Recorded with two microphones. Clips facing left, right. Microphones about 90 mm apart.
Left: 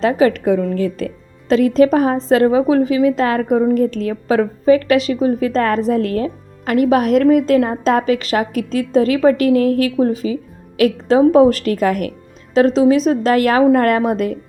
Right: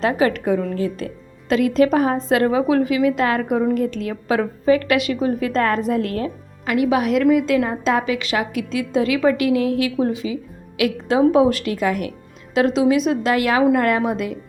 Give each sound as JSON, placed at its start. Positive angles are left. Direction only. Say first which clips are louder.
{"t": 0.0, "sound": "a woman's voice", "louder": "left 4 dB", "side_deg": 35}
{"t": 12.5, "sound": "a woman's voice", "louder": "left 4 dB", "side_deg": 35}